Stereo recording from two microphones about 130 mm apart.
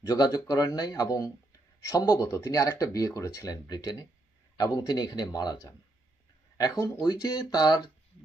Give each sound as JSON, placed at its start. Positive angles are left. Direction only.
{"t": 0.0, "sound": "speech", "side_deg": 30}
{"t": 6.6, "sound": "speech", "side_deg": 25}